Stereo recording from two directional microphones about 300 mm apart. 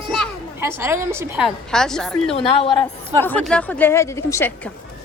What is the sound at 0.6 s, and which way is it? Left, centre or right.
Speech, centre.